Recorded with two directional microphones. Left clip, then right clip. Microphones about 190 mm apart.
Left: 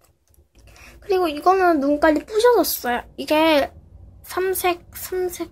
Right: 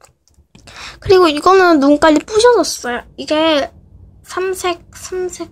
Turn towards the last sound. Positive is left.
turn(degrees=0)  # may be behind; listen again after turning